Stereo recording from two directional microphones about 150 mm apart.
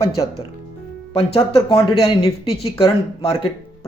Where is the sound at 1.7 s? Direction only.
40° left (ahead or behind).